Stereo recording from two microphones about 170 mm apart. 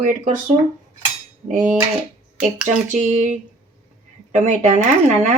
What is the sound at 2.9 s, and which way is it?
Speech, 45° right (ahead or behind).